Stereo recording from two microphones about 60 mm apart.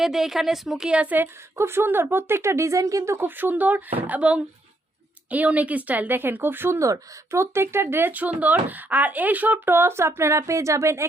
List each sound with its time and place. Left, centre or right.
0.0 s speech: centre
0.9 s speech: centre
1.5 s speech: right
3.2 s speech: right
6.7 s speech: right
9.6 s speech: right